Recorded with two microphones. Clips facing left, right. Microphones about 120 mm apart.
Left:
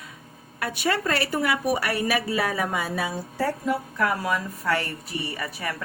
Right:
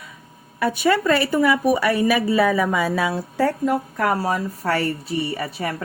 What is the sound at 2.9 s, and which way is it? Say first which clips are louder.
Speech: right 6 dB; 75° right (ahead or behind).